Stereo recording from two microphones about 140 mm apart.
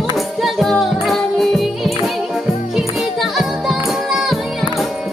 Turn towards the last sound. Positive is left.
turn(degrees=0)  # may be behind; listen again after turning